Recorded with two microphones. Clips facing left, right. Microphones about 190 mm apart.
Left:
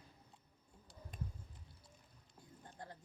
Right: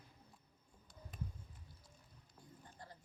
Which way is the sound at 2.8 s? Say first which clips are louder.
Left 5 dB; 55° left (ahead or behind).